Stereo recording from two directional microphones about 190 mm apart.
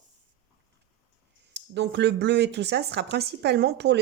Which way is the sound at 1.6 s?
65° right (ahead or behind).